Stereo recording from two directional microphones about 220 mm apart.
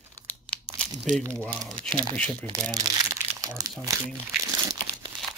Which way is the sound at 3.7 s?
5° left (ahead or behind).